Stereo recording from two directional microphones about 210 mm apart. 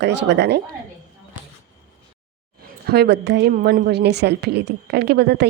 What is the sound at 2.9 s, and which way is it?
A woman's voice, 55° right (ahead or behind).